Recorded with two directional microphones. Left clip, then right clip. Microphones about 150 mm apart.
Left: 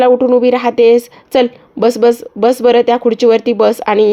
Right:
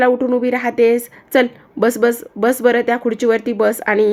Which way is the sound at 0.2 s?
20° left (ahead or behind).